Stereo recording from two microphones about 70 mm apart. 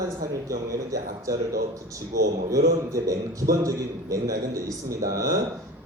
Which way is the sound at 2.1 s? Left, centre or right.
Right.